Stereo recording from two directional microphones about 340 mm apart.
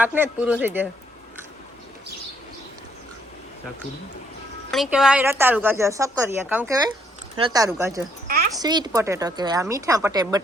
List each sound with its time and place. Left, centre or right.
0.0 s speech: centre
4.7 s speech: centre